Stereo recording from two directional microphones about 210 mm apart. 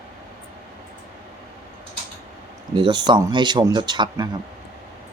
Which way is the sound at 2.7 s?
20° right (ahead or behind).